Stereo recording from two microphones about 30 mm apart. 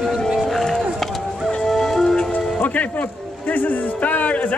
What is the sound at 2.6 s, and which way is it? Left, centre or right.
Music, left.